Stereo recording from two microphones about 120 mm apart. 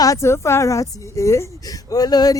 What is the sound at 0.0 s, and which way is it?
A woman's voice, 25° left (ahead or behind).